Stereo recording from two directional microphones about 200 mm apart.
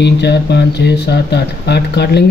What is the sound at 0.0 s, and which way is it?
Speech, 55° left (ahead or behind).